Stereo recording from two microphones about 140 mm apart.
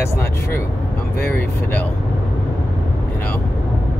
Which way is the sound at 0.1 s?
15° left (ahead or behind).